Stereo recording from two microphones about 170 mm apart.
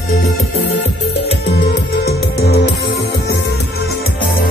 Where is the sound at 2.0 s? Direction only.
65° left (ahead or behind).